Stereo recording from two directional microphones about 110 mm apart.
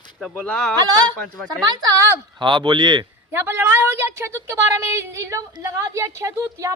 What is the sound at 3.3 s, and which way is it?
Speech, 20° right (ahead or behind).